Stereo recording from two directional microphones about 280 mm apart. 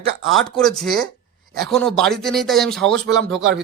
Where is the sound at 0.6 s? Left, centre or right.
Centre.